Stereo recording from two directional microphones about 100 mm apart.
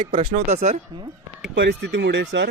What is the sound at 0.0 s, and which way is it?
Speech, 65° right (ahead or behind).